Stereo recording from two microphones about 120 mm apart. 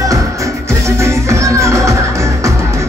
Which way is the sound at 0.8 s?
25° right (ahead or behind).